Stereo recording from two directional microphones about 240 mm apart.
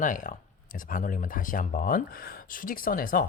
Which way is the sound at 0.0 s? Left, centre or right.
Left.